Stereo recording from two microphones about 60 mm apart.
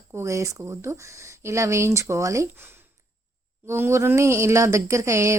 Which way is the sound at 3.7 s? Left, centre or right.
Right.